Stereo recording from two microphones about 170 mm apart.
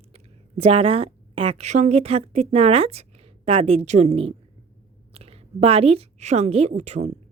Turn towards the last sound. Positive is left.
turn(degrees=-40)  # may be behind; listen again after turning